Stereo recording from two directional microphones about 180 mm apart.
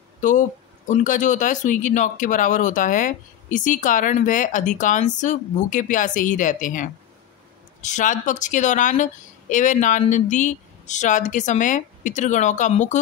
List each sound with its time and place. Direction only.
0.2 s speech: 45° left (ahead or behind)